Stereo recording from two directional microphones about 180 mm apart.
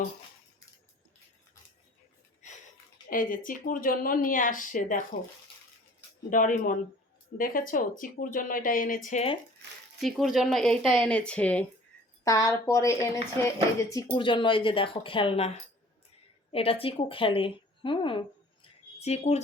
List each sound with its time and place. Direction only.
3.1 s speech: 50° left (ahead or behind)
6.3 s speech: 45° left (ahead or behind)
10.0 s speech: centre (ahead or behind)
12.2 s a woman's voice: 20° left (ahead or behind)
13.9 s a woman's voice: 25° left (ahead or behind)